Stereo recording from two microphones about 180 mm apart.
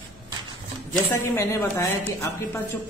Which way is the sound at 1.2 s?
15° left (ahead or behind).